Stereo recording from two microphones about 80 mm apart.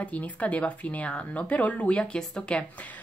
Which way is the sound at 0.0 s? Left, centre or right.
Centre.